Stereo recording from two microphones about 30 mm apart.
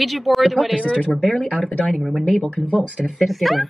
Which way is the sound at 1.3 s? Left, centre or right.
Centre.